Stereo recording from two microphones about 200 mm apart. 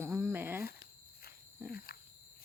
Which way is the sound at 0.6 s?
50° left (ahead or behind).